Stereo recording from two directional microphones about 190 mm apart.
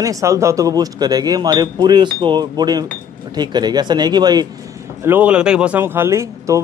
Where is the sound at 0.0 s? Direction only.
15° right (ahead or behind).